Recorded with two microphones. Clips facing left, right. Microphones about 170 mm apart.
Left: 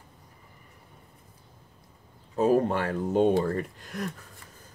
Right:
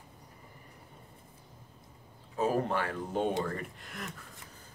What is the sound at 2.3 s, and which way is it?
Speech, 40° left (ahead or behind).